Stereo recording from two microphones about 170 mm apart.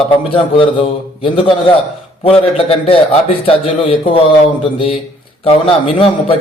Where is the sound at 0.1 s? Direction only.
30° left (ahead or behind).